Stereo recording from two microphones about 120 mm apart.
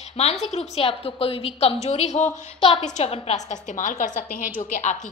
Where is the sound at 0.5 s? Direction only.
60° left (ahead or behind).